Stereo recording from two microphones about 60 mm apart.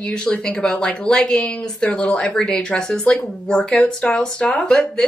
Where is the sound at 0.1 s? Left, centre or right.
Centre.